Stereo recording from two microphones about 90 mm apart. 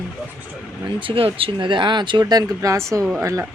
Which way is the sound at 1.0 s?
90° right.